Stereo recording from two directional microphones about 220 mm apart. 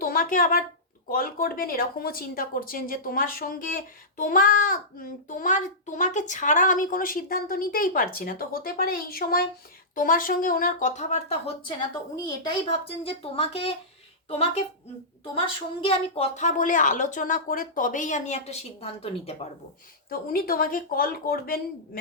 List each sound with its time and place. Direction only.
0.0 s a woman's voice: 40° left (ahead or behind)
15.8 s speech: 25° left (ahead or behind)
20.1 s speech: 40° left (ahead or behind)